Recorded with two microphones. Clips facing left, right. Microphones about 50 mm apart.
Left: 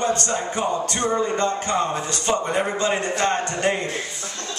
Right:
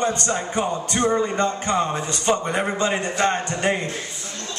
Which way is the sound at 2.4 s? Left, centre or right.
Centre.